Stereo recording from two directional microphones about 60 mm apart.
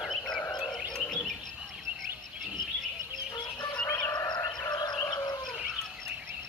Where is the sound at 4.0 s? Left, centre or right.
Left.